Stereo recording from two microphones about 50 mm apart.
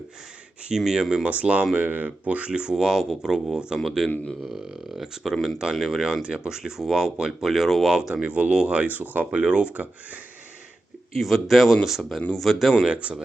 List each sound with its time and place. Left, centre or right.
0.8 s speech: centre
1.3 s speech: right
1.7 s speech: right; by 3.8 s centre
4.0 s speech: centre
4.4 s speech: centre
5.2 s speech: centre
8.1 s speech: right
8.9 s speech: right
9.4 s speech: centre
11.2 s speech: centre
12.8 s speech: right